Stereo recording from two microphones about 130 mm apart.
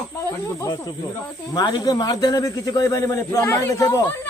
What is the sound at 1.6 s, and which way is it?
Speech, 35° left (ahead or behind).